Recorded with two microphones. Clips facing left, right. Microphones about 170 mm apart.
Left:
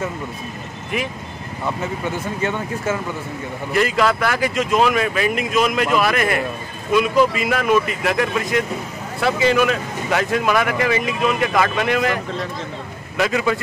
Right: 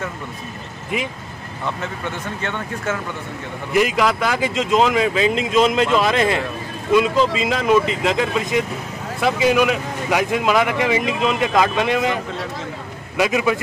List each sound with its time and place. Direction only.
1.8 s speech: 5° left (ahead or behind)
3.7 s speech: 15° right (ahead or behind)
13.2 s speech: 15° right (ahead or behind)